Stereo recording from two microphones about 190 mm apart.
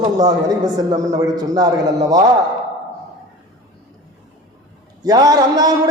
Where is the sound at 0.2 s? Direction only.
20° right (ahead or behind).